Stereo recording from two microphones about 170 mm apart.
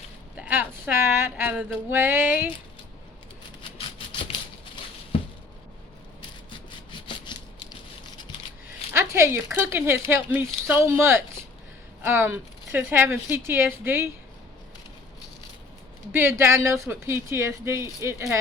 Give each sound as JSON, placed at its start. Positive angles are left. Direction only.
{"t": 0.3, "sound": "speech", "side_deg": -10}
{"t": 3.6, "sound": "a sound", "side_deg": 30}
{"t": 8.9, "sound": "speech", "side_deg": -15}
{"t": 16.4, "sound": "speech", "side_deg": -15}